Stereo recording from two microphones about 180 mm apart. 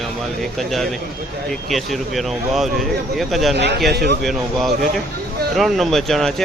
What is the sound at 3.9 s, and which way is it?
Speech, 65° right (ahead or behind).